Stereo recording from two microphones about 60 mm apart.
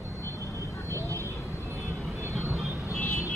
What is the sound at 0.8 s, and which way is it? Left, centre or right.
Vehicle, right.